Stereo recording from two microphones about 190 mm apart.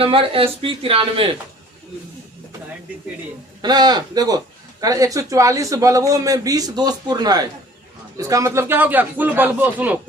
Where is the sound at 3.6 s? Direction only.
20° right (ahead or behind).